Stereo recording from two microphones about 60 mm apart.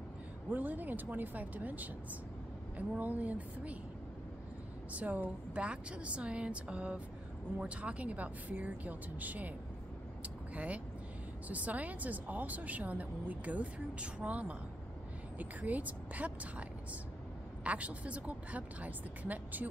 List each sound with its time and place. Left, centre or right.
0.5 s a woman's voice: right
3.0 s a woman's voice: right
4.9 s a woman's voice: right
10.2 s a sound: right
11.4 s a woman's voice: right
17.6 s a woman's voice: right